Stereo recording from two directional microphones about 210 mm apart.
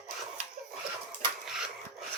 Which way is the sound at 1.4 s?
5° right (ahead or behind).